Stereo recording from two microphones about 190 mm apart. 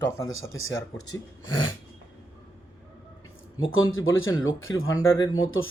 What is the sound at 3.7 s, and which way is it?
Speech, 90° left.